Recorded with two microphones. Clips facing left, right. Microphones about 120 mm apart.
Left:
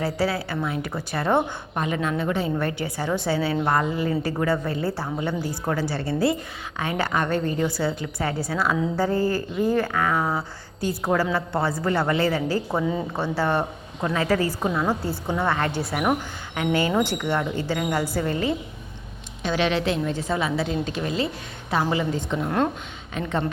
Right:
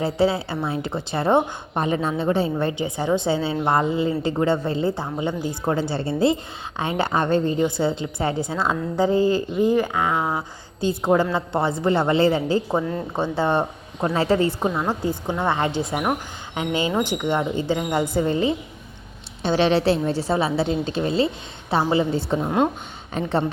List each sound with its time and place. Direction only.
0.0 s speech: 25° right (ahead or behind)
12.8 s speech: 5° left (ahead or behind)
13.1 s a woman's voice: 20° right (ahead or behind)
22.4 s a woman's voice: 15° right (ahead or behind)
23.1 s a woman's voice: 35° right (ahead or behind)